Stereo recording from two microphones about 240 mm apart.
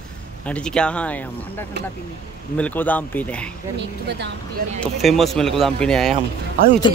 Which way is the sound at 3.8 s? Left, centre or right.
Right.